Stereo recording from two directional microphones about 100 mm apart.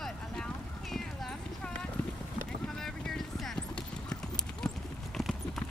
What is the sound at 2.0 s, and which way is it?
Clip-clop, 15° left (ahead or behind).